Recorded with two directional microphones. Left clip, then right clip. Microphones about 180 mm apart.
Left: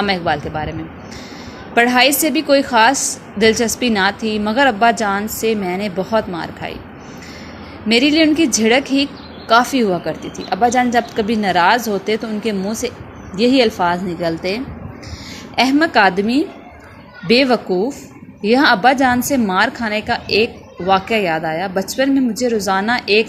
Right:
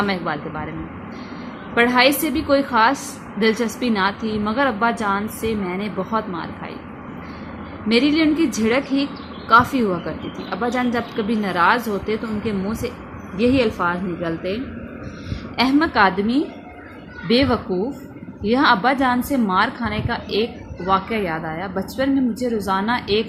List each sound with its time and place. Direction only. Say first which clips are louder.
0.0 s a woman's voice: left 5 dB; 25° left (ahead or behind)
1.7 s a woman's voice: left 3 dB; 25° left (ahead or behind)
7.9 s a woman's voice: left 4 dB; 25° left (ahead or behind)